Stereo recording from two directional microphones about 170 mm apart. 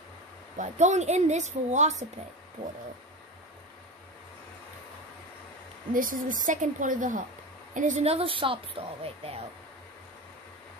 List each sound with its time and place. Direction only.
0.6 s a woman's voice: 45° right (ahead or behind)
5.9 s a woman's voice: 55° right (ahead or behind); by 9.4 s 35° right (ahead or behind)